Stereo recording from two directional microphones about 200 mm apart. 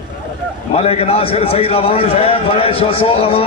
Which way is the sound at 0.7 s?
30° left (ahead or behind).